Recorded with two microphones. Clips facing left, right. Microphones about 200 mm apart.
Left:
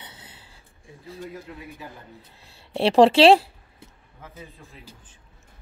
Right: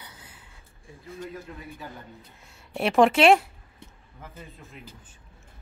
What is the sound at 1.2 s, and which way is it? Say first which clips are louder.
Speech: left 1 dB; 10° left (ahead or behind).